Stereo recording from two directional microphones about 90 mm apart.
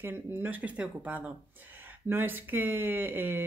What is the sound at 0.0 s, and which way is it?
Speech, 25° right (ahead or behind).